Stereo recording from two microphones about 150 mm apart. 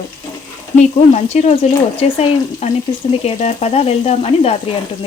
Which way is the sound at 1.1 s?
50° left (ahead or behind).